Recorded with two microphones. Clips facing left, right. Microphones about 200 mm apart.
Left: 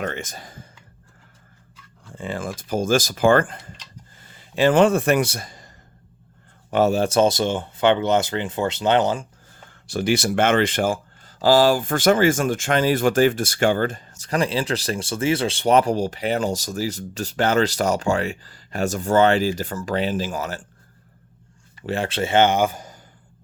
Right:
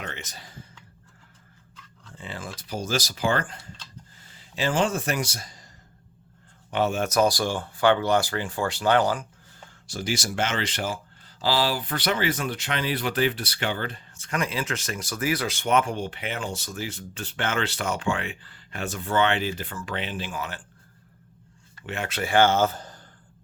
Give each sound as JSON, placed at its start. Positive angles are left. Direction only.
{"t": 0.0, "sound": "speech", "side_deg": 50}
{"t": 2.1, "sound": "a man's voice", "side_deg": 50}
{"t": 6.7, "sound": "speech", "side_deg": 40}
{"t": 9.8, "sound": "speech", "side_deg": 60}
{"t": 21.8, "sound": "speech", "side_deg": 35}